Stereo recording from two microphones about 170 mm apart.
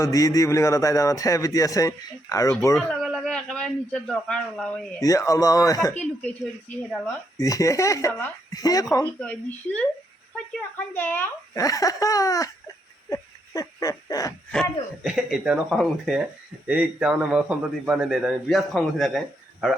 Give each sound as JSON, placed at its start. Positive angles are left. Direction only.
{"t": 0.0, "sound": "a man's voice", "side_deg": 20}
{"t": 2.7, "sound": "a man's voice", "side_deg": 0}
{"t": 4.9, "sound": "a man's voice", "side_deg": 20}
{"t": 6.0, "sound": "speech", "side_deg": 5}
{"t": 7.3, "sound": "a man's voice", "side_deg": 20}
{"t": 13.1, "sound": "a sound", "side_deg": 20}
{"t": 14.5, "sound": "a man's voice", "side_deg": 0}